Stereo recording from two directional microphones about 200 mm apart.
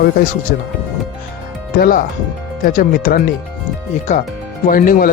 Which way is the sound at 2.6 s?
45° left (ahead or behind).